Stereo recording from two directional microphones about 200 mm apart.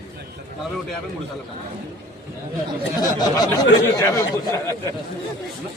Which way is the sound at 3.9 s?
15° left (ahead or behind).